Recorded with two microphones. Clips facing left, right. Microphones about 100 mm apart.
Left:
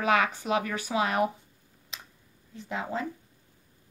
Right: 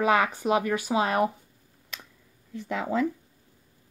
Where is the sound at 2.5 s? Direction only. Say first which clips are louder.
Right 5 dB; 65° right (ahead or behind).